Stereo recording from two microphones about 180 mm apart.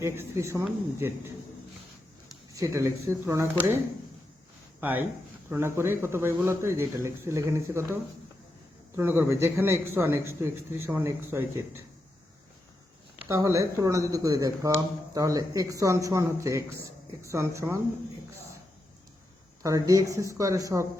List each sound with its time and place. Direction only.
0.0 s a man's voice: 15° right (ahead or behind)
2.5 s a man's voice: 15° right (ahead or behind)
4.8 s a man's voice: 10° right (ahead or behind)
9.0 s a man's voice: 15° right (ahead or behind)
13.2 s a man's voice: 15° right (ahead or behind)
19.6 s a man's voice: 20° right (ahead or behind)